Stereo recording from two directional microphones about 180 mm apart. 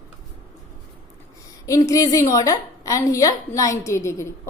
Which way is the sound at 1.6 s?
15° left (ahead or behind).